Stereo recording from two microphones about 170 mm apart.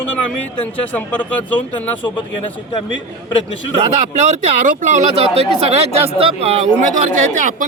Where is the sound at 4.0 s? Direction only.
45° right (ahead or behind).